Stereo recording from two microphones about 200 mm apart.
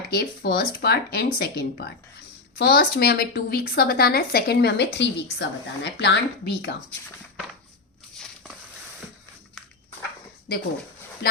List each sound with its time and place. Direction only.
0.1 s a woman's voice: 55° left (ahead or behind)
9.6 s walk: 5° left (ahead or behind)